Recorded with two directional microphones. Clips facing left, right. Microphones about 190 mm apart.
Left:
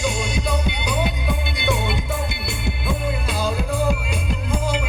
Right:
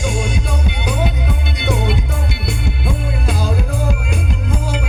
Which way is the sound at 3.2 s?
50° right (ahead or behind).